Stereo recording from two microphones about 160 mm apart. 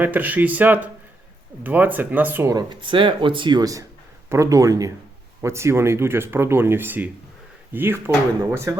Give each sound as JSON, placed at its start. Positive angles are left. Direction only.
{"t": 0.0, "sound": "speech", "side_deg": -10}